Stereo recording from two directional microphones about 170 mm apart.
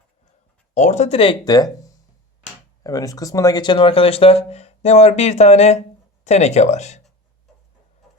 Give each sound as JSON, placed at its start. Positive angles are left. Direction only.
{"t": 0.7, "sound": "speech", "side_deg": 45}
{"t": 2.8, "sound": "speech", "side_deg": 20}